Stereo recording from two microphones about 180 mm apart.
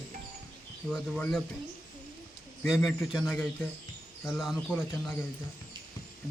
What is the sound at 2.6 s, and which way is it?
Speech, 5° left (ahead or behind).